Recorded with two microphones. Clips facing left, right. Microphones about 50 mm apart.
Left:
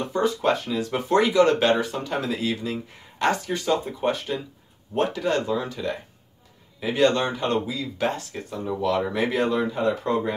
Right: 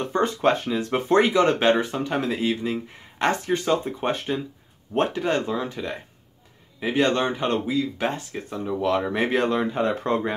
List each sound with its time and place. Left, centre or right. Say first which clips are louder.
0.1 s speech: right 1 dB; right
8.1 s speech: even; centre
9.3 s speech: right 1 dB; right